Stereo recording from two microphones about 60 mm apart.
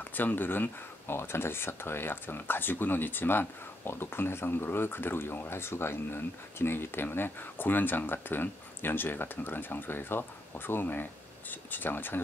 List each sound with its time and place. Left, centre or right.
0.0 s speech: left